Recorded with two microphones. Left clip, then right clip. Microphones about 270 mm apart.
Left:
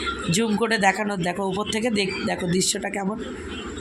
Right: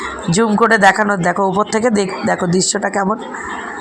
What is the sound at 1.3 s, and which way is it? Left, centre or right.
Speech, centre.